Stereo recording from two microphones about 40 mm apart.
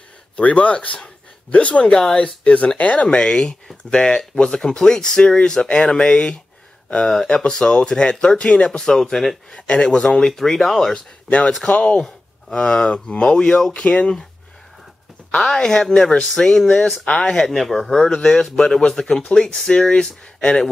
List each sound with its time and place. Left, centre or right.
0.4 s speech: left
2.0 s speech: centre
2.4 s speech: left
7.4 s speech: left
8.6 s speech: centre
9.5 s speech: left; by 11.0 s centre
11.2 s speech: left
12.5 s speech: left
15.4 s speech: centre
17.5 s speech: centre
18.1 s speech: centre